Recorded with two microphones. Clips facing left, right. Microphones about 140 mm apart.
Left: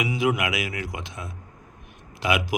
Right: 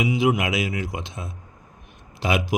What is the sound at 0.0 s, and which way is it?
Speech, 25° right (ahead or behind).